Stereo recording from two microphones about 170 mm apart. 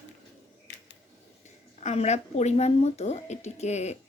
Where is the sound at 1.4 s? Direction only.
40° left (ahead or behind).